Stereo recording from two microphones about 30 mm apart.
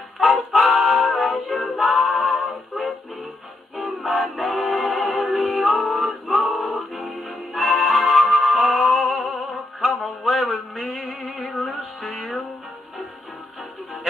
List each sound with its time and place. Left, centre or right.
0.2 s music: centre